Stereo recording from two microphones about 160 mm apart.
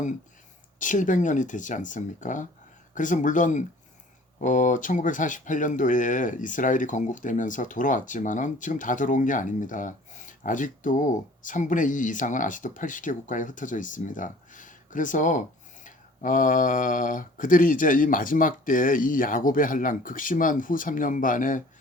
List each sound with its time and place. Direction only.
0.8 s speech: 55° left (ahead or behind)